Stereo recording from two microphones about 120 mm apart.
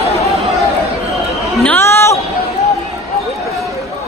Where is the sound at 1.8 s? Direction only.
20° left (ahead or behind).